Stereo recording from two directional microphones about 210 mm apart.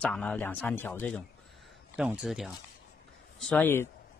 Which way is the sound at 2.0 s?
5° right (ahead or behind).